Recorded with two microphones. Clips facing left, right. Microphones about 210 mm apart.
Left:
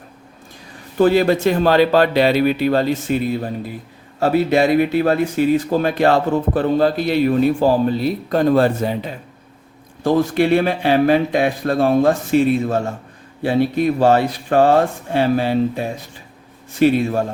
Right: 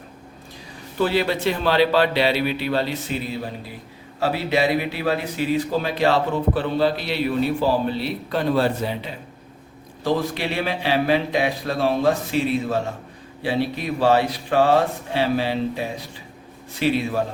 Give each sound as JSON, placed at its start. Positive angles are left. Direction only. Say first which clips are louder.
{"t": 0.9, "sound": "speech", "louder": "left 7 dB", "side_deg": 45}